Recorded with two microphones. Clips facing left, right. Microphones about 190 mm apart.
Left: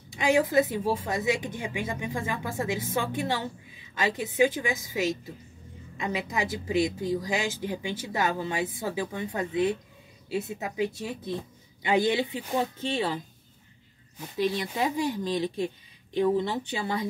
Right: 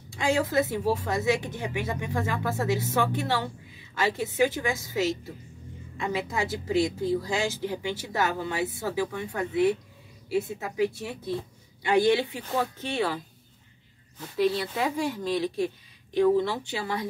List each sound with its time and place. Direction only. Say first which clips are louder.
0.1 s speech: left 2 dB; 20° left (ahead or behind)